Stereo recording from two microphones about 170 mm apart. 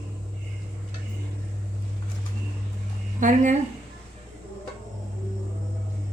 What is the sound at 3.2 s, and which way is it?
Speech, 50° right (ahead or behind).